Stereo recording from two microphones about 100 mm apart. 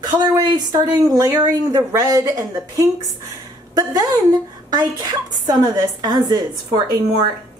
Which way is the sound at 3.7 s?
40° right (ahead or behind).